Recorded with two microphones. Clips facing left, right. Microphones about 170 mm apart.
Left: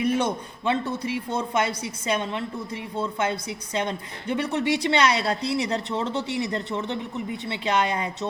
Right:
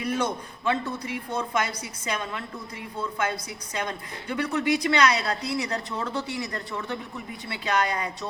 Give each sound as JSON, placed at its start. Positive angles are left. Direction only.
{"t": 0.0, "sound": "a woman's voice", "side_deg": 25}